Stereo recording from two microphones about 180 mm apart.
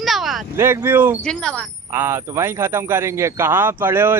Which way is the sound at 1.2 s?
5° left (ahead or behind).